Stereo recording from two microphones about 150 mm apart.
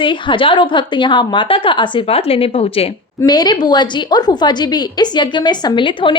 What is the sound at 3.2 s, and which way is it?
A woman's voice, 25° left (ahead or behind).